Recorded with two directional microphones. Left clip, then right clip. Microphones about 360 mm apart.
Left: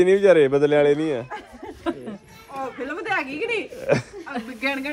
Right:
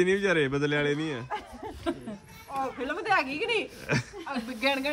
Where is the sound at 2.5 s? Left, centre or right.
Right.